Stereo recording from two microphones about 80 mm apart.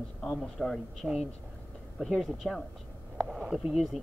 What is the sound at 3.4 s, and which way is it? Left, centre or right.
Speech, centre.